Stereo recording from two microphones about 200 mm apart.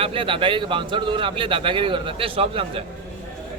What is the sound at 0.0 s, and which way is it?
Speech, 25° right (ahead or behind).